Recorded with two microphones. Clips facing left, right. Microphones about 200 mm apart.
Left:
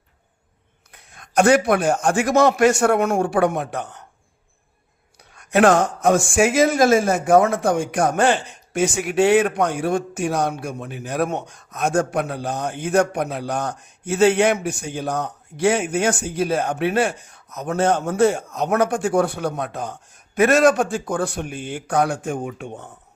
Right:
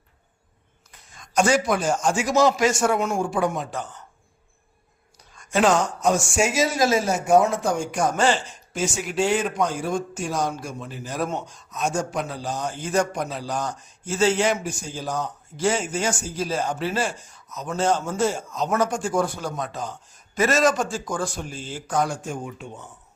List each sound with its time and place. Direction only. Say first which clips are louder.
0.9 s a man's voice: left 2 dB; 60° left (ahead or behind)
5.3 s a man's voice: left 5 dB; 65° left (ahead or behind)